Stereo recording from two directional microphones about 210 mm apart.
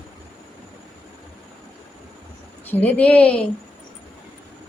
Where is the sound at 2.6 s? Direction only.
10° left (ahead or behind).